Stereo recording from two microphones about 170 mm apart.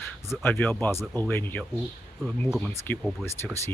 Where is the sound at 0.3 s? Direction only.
15° left (ahead or behind).